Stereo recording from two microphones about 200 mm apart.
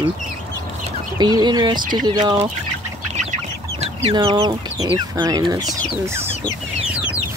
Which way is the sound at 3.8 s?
30° right (ahead or behind).